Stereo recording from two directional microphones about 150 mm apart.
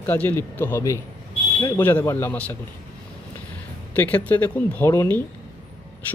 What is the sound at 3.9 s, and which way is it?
Speech, 10° left (ahead or behind).